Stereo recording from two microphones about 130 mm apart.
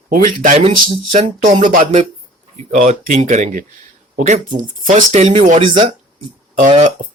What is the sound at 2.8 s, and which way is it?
Speech, 85° right.